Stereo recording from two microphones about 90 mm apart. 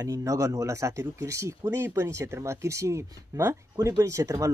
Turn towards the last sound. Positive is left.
turn(degrees=-35)  # may be behind; listen again after turning